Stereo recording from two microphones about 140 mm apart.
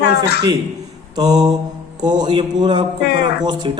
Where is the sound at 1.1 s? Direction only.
30° right (ahead or behind).